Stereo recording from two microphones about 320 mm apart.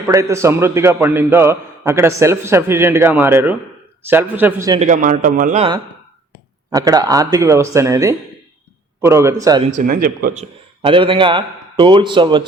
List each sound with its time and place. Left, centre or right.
0.1 s a man's voice: centre
4.8 s a man's voice: right
9.7 s speech: right
10.8 s a man's voice: centre